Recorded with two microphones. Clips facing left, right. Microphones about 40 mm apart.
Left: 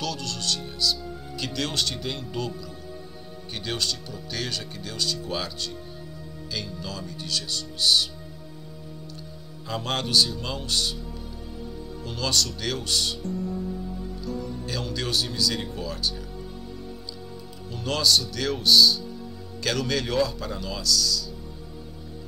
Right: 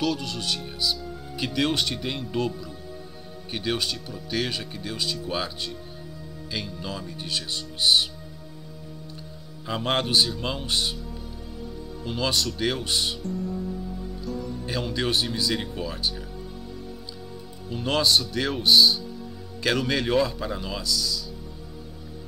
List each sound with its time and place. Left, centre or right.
0.0 s music: centre
1.3 s speech: right
3.5 s speech: centre
9.7 s speech: right
12.0 s speech: centre
13.2 s music: centre
14.7 s speech: right
17.6 s speech: right